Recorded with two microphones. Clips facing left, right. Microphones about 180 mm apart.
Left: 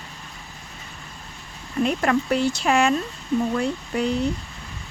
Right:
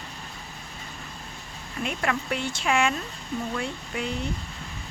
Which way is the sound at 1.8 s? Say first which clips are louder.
Left 7 dB; 40° left (ahead or behind).